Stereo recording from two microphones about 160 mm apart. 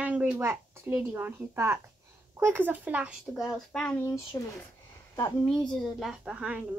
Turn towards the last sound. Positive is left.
turn(degrees=-5)  # may be behind; listen again after turning